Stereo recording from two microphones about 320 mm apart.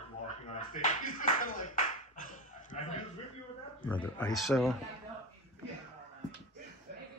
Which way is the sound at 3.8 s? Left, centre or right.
Centre.